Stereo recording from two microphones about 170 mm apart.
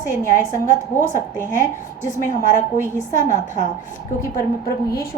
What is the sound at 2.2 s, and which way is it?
A woman's voice, 50° left (ahead or behind).